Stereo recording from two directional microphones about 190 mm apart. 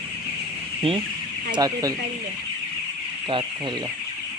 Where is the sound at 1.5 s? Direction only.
20° right (ahead or behind).